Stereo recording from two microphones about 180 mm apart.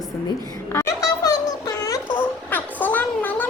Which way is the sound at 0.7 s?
15° left (ahead or behind).